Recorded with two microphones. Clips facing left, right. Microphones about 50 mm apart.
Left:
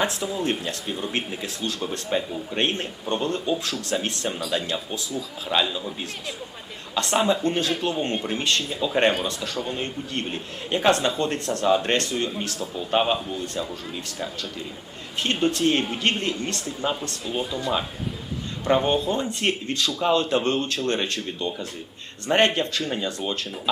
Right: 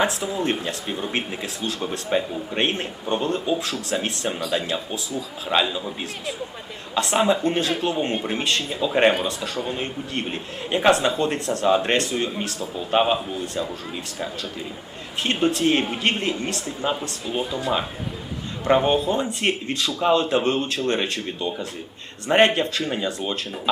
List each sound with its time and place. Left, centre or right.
0.0 s speech: centre
15.2 s speech: centre